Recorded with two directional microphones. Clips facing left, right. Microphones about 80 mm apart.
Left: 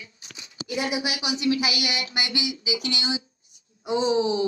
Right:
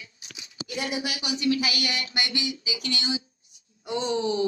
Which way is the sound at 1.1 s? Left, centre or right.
Centre.